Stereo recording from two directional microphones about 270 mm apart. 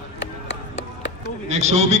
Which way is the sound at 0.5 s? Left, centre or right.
Left.